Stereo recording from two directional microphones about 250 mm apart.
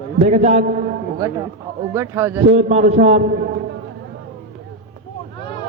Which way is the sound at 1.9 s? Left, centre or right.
Centre.